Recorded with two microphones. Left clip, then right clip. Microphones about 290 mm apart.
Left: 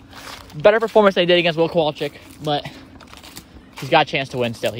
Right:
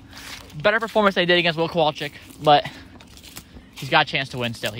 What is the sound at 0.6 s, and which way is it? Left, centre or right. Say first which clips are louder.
Speech: left 6 dB; centre.